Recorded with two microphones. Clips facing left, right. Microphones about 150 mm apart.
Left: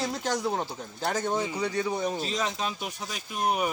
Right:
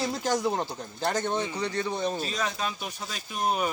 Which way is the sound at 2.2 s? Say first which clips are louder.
Left 1 dB; 20° left (ahead or behind).